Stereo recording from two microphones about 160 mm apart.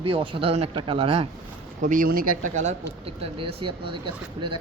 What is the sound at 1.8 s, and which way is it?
Speech, 60° right (ahead or behind).